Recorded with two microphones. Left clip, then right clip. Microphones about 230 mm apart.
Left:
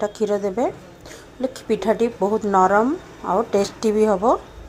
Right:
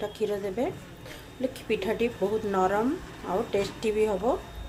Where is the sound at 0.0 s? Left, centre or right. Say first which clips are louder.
Left 8 dB; centre.